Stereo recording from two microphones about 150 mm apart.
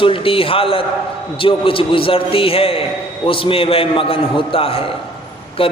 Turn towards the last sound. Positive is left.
turn(degrees=40)  # may be behind; listen again after turning